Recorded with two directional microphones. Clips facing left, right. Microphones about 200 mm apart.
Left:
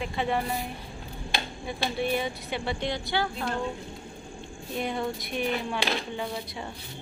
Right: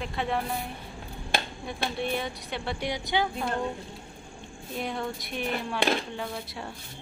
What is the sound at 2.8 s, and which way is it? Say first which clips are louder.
Speech: right 4 dB; 15° right (ahead or behind).